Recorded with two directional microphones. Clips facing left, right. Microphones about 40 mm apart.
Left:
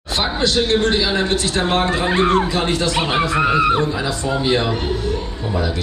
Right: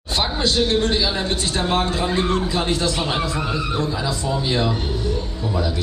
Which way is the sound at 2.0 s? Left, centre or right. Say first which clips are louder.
Left 5 dB; left.